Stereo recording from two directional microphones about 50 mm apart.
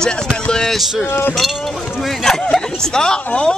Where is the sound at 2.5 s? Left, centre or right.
Centre.